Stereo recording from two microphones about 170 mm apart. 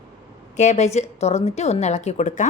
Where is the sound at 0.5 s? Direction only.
45° left (ahead or behind).